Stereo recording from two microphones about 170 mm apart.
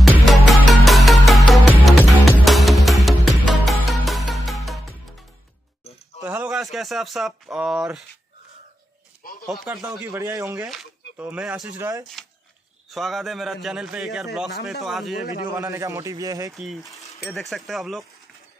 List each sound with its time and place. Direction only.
0.0 s music: centre (ahead or behind)
6.2 s speech: 10° right (ahead or behind)
9.5 s a man's voice: centre (ahead or behind)
9.8 s a man's voice: 15° right (ahead or behind)
10.6 s a man's voice: centre (ahead or behind)
11.8 s speech: 20° right (ahead or behind)
12.9 s a man's voice: centre (ahead or behind)
15.5 s speech: 20° right (ahead or behind)
16.5 s a man's voice: centre (ahead or behind)